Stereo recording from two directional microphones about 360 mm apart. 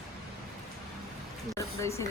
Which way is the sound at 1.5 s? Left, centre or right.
Centre.